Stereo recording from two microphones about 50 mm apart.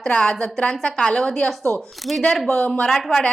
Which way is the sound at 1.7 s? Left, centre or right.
Left.